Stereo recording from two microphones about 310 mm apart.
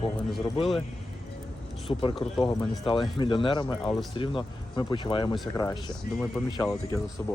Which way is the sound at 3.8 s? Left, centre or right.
Centre.